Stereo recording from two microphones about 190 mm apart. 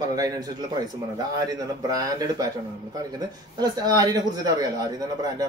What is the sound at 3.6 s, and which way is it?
A man's voice, 20° right (ahead or behind).